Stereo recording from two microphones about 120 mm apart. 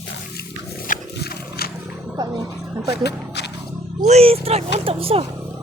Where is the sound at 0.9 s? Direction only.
90° left.